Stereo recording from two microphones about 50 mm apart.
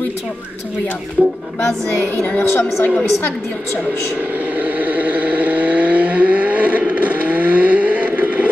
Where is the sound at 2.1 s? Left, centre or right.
Left.